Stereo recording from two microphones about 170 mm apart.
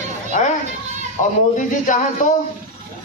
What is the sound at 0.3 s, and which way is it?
A man's voice, 50° left (ahead or behind).